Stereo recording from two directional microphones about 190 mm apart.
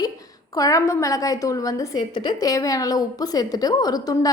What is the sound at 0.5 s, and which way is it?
A woman's voice, 15° left (ahead or behind).